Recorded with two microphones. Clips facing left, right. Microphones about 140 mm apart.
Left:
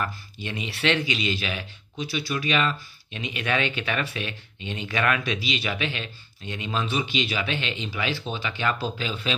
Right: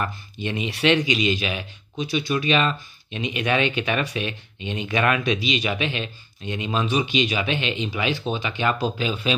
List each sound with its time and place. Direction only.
0.0 s speech: 20° right (ahead or behind)